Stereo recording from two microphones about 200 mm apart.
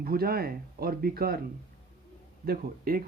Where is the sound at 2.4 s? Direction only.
50° right (ahead or behind).